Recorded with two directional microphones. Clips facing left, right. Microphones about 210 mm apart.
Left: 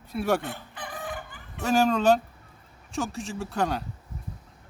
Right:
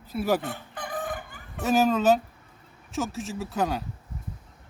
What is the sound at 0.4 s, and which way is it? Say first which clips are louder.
Chicken: right 2 dB; 45° right (ahead or behind).